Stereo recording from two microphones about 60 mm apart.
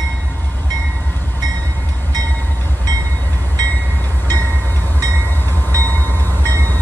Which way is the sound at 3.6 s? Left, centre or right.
Left.